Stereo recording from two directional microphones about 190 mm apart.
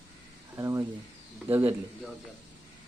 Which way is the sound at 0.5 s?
15° right (ahead or behind).